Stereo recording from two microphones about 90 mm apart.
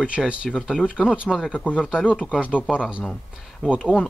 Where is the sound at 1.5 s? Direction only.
15° left (ahead or behind).